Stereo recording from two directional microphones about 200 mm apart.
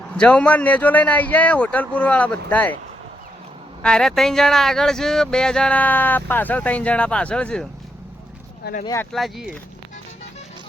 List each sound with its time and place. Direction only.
0.1 s a man's voice: 5° left (ahead or behind)
3.8 s speech: 5° left (ahead or behind)
9.1 s speech: centre (ahead or behind)